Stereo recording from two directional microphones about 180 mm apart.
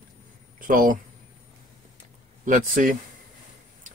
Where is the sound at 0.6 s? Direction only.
50° right (ahead or behind).